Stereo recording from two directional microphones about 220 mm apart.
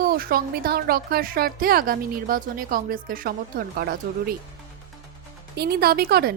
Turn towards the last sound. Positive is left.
turn(degrees=-45)  # may be behind; listen again after turning